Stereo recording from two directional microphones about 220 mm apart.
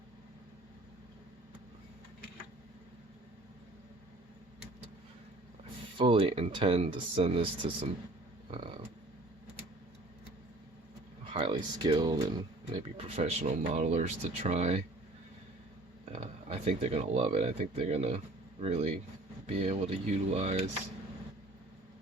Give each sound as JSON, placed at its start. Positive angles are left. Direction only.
{"t": 6.0, "sound": "speech", "side_deg": -25}
{"t": 8.4, "sound": "a sound", "side_deg": -25}
{"t": 11.3, "sound": "speech", "side_deg": -25}
{"t": 16.1, "sound": "speech", "side_deg": -30}